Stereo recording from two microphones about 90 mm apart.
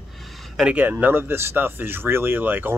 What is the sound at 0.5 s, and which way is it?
Speech, 10° right (ahead or behind).